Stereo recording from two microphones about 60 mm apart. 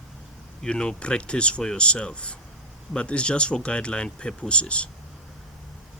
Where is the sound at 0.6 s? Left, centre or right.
Centre.